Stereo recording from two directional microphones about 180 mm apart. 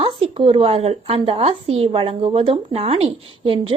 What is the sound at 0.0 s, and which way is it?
Speech, 30° right (ahead or behind).